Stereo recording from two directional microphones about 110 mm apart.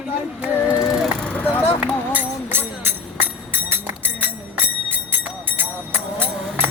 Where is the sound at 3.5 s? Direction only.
20° right (ahead or behind).